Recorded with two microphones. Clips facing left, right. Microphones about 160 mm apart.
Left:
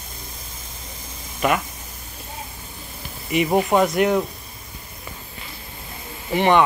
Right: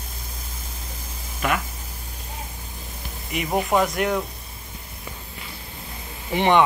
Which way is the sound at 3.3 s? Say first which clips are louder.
Left 4 dB; 5° left (ahead or behind).